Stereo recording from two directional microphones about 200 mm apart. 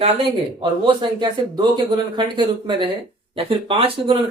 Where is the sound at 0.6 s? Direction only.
25° right (ahead or behind).